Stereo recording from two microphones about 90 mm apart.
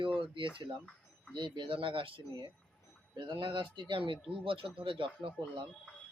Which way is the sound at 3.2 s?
60° right (ahead or behind).